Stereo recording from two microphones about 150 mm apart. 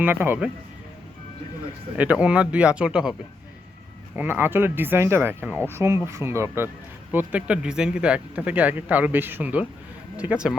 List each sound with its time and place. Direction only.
0.0 s speech: 15° right (ahead or behind)
2.0 s speech: 10° right (ahead or behind)